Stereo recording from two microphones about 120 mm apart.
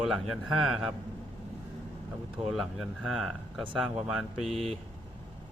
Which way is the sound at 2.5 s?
Centre (ahead or behind).